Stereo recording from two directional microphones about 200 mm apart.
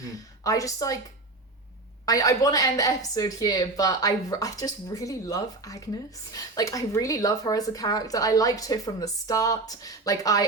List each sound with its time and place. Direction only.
0.0 s a woman's voice: 15° left (ahead or behind)
2.0 s speech: 15° left (ahead or behind)